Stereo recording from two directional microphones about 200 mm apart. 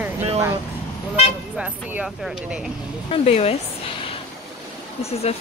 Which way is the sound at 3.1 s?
30° left (ahead or behind).